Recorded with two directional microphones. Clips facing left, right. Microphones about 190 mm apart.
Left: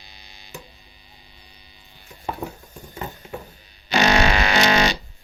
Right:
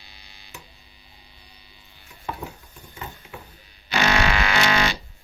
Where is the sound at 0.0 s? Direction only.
20° left (ahead or behind).